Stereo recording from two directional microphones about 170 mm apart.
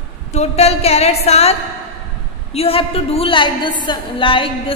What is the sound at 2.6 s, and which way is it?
A woman's voice, 35° left (ahead or behind).